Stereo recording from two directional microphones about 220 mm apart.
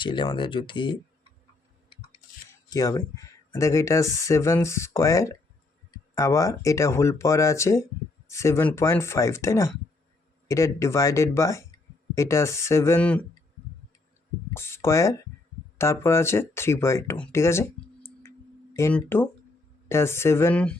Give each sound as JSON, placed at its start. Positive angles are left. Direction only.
{"t": 0.0, "sound": "speech", "side_deg": 20}
{"t": 2.6, "sound": "speech", "side_deg": 15}
{"t": 14.5, "sound": "speech", "side_deg": 10}